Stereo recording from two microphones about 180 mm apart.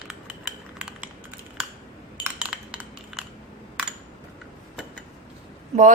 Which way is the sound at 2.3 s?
5° right (ahead or behind).